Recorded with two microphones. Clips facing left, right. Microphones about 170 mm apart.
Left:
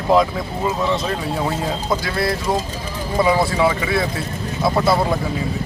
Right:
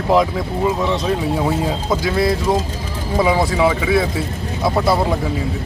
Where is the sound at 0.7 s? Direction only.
5° right (ahead or behind).